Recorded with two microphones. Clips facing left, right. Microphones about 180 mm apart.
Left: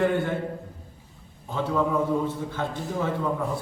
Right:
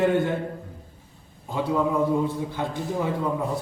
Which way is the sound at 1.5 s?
15° right (ahead or behind).